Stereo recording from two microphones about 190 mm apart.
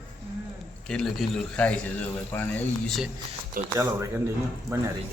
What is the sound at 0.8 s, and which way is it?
A man's voice, 5° left (ahead or behind).